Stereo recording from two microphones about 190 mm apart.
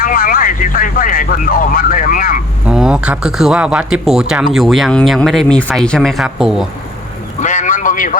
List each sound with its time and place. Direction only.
0.0 s speech: 45° left (ahead or behind)
2.6 s speech: 5° right (ahead or behind)
7.4 s a sound: 40° left (ahead or behind)